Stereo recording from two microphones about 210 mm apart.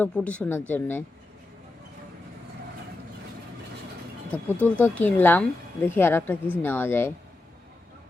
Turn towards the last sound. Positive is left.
turn(degrees=10)  # may be behind; listen again after turning